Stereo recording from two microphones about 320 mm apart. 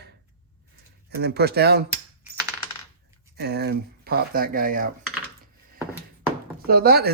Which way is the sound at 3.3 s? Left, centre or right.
Right.